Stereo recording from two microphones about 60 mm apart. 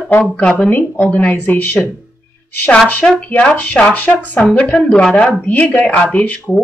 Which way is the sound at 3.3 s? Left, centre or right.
Left.